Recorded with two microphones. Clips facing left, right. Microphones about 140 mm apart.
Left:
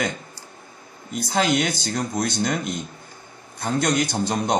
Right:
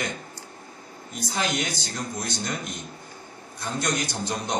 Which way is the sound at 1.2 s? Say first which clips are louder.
Left 7 dB; 65° left (ahead or behind).